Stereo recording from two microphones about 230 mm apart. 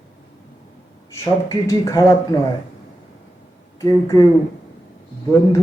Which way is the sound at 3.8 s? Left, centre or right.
Centre.